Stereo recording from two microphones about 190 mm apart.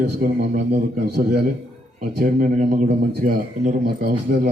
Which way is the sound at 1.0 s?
60° right (ahead or behind).